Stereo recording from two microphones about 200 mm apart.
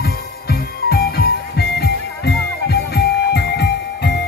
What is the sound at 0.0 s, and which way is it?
Music, 50° left (ahead or behind).